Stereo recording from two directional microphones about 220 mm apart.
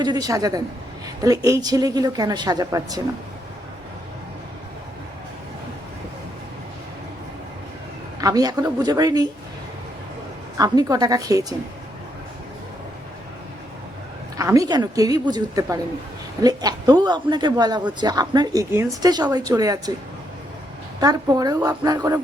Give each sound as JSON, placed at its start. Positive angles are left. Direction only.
{"t": 0.0, "sound": "a woman's voice", "side_deg": -15}
{"t": 8.2, "sound": "a woman's voice", "side_deg": -15}
{"t": 10.6, "sound": "a woman's voice", "side_deg": -15}
{"t": 14.3, "sound": "a woman's voice", "side_deg": -15}
{"t": 21.0, "sound": "a woman's voice", "side_deg": -15}